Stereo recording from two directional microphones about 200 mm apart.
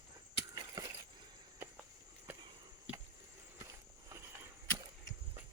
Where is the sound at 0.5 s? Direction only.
20° right (ahead or behind).